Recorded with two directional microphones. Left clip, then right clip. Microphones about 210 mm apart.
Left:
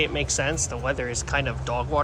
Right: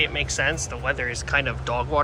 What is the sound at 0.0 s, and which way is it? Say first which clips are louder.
Speech: right 2 dB; 20° left (ahead or behind).